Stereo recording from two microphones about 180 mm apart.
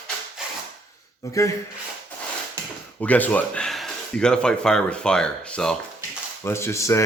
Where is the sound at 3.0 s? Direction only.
10° left (ahead or behind).